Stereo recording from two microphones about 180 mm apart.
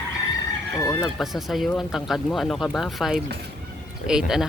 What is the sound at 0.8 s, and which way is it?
Chicken, 15° left (ahead or behind).